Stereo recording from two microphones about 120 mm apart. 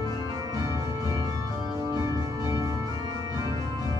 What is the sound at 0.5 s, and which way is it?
Organ, 30° right (ahead or behind).